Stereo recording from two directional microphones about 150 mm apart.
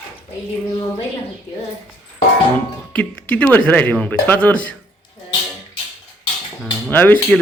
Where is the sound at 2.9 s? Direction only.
10° left (ahead or behind).